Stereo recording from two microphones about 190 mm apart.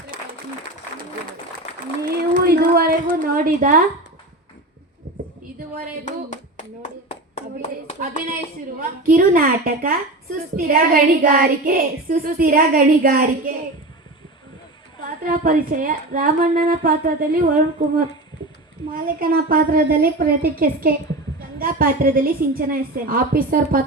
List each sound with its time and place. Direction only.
2.0 s a sound: 50° right (ahead or behind)
7.3 s clapping: 35° left (ahead or behind)
8.8 s speech: 45° right (ahead or behind)
15.2 s speech: 45° right (ahead or behind)